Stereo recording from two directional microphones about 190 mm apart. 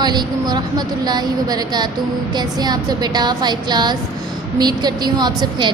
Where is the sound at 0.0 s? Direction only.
20° right (ahead or behind).